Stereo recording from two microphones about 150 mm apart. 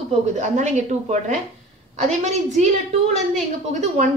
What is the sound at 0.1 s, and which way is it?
A woman's voice, 50° right (ahead or behind).